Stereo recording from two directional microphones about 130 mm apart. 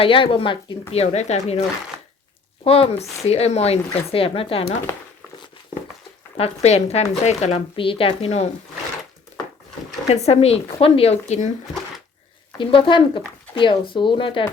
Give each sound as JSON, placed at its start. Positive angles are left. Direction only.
{"t": 0.0, "sound": "speech", "side_deg": 45}
{"t": 1.0, "sound": "speech", "side_deg": 60}
{"t": 2.6, "sound": "speech", "side_deg": 50}
{"t": 6.3, "sound": "speech", "side_deg": 55}
{"t": 7.8, "sound": "speech", "side_deg": 45}
{"t": 10.1, "sound": "speech", "side_deg": 55}
{"t": 12.5, "sound": "speech", "side_deg": 40}